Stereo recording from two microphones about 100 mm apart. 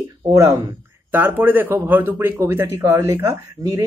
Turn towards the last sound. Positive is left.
turn(degrees=-35)  # may be behind; listen again after turning